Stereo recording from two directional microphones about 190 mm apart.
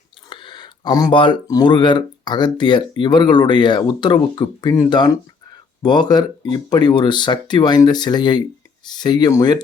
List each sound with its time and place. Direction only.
0.3 s speech: 25° left (ahead or behind)